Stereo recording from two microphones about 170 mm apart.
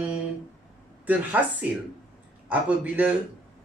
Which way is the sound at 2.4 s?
10° right (ahead or behind).